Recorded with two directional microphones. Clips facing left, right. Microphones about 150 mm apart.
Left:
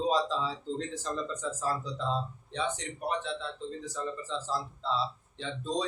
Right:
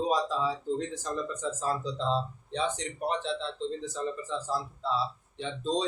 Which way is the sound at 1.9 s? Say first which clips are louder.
Right 3 dB; 30° right (ahead or behind).